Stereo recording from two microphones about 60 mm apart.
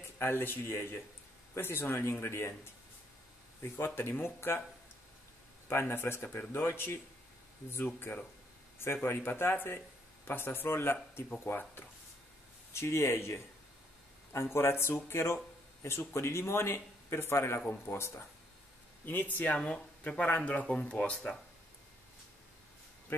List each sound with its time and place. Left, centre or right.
0.2 s speech: left
5.7 s speech: left
17.9 s speech: left
19.0 s speech: left